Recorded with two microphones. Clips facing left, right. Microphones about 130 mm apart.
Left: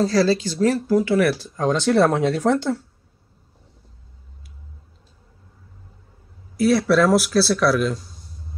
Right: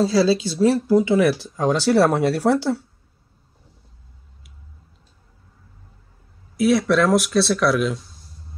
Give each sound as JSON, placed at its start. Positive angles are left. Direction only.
{"t": 0.0, "sound": "speech", "side_deg": -5}
{"t": 0.8, "sound": "speech", "side_deg": -20}
{"t": 1.3, "sound": "speech", "side_deg": -5}
{"t": 6.5, "sound": "speech", "side_deg": 0}